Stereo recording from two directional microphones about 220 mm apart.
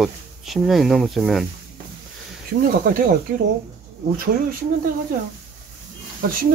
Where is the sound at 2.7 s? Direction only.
40° right (ahead or behind).